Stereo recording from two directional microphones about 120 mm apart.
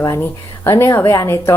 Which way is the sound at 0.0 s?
20° left (ahead or behind).